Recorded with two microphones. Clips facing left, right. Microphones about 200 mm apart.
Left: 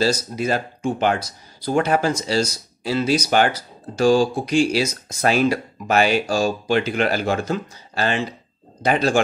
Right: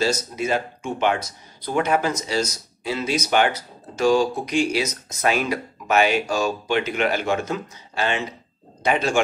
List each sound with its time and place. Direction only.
0.0 s speech: 35° left (ahead or behind)